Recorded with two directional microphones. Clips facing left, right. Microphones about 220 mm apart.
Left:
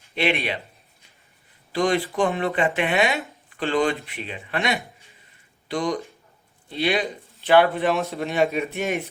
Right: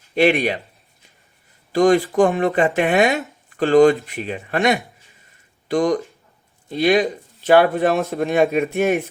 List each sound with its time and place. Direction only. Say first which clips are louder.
0.1 s speech: right 8 dB; 45° right (ahead or behind)
1.7 s speech: right 7 dB; 45° right (ahead or behind)